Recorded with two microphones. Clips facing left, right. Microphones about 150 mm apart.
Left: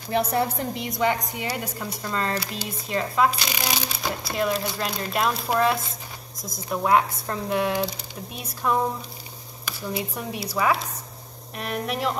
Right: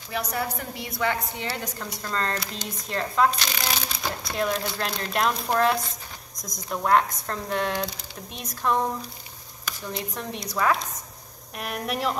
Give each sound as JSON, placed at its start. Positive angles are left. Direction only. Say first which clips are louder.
{"t": 0.3, "sound": "speech", "louder": "left 5 dB", "side_deg": 25}